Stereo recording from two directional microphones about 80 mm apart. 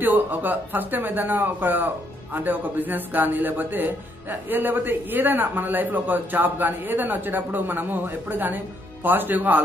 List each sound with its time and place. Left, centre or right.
0.0 s a man's voice: right